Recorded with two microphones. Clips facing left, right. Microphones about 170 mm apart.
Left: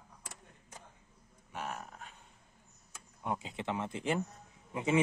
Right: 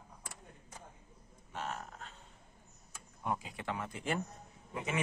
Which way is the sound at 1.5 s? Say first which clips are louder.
Even; 10° left (ahead or behind).